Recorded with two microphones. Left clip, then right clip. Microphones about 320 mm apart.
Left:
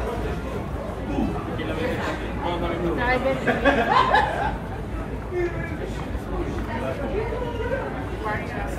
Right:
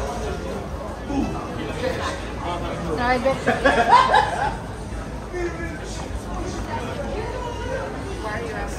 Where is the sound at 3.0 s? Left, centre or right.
Right.